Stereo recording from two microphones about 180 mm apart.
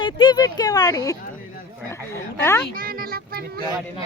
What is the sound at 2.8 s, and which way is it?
Music, 55° right (ahead or behind).